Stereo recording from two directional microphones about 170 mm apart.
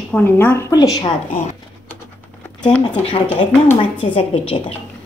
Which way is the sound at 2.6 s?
5° left (ahead or behind).